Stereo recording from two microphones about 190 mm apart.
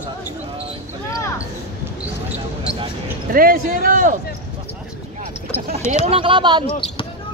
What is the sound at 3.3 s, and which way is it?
Speech, 50° right (ahead or behind).